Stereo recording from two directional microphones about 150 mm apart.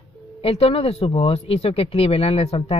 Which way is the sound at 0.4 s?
40° left (ahead or behind).